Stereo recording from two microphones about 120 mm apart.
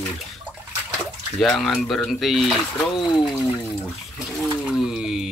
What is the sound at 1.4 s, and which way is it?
Speech, 5° left (ahead or behind).